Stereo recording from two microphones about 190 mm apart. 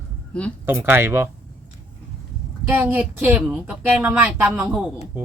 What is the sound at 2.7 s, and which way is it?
A woman's voice, 10° right (ahead or behind).